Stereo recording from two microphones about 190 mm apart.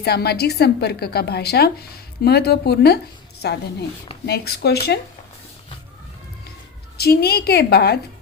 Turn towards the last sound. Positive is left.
turn(degrees=55)  # may be behind; listen again after turning